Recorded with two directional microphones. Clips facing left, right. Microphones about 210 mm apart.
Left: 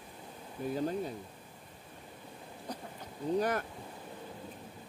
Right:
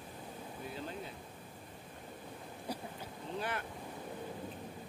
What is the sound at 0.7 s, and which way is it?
Speech, 45° left (ahead or behind).